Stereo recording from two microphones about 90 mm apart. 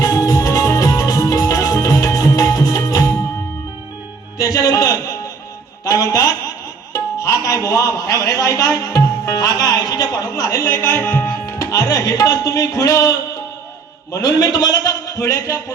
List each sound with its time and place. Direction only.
0.0 s music: 40° left (ahead or behind)
4.4 s a sound: 40° left (ahead or behind)
6.9 s music: 35° left (ahead or behind)
14.1 s a man's voice: 45° left (ahead or behind)
15.2 s speech: 30° left (ahead or behind)